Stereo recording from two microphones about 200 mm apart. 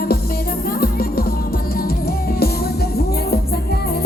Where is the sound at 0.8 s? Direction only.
50° left (ahead or behind).